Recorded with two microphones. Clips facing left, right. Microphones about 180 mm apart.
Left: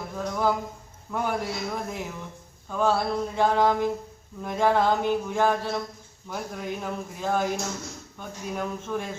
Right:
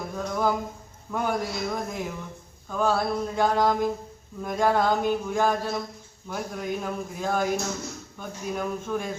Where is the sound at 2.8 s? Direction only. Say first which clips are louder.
Even; 5° right (ahead or behind).